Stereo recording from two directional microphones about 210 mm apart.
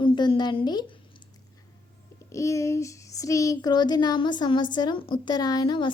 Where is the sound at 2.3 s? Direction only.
15° left (ahead or behind).